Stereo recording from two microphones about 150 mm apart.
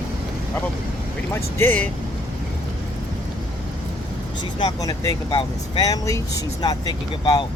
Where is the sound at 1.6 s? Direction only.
10° left (ahead or behind).